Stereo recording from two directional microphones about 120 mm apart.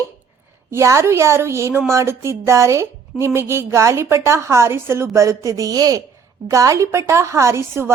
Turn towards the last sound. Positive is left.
turn(degrees=-20)  # may be behind; listen again after turning